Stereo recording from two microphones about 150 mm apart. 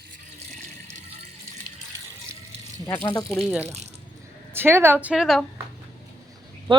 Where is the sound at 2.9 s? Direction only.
15° left (ahead or behind).